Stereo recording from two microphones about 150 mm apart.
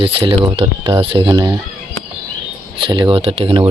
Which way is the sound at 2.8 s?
35° right (ahead or behind).